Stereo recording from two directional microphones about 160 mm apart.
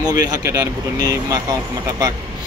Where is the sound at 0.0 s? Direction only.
25° right (ahead or behind).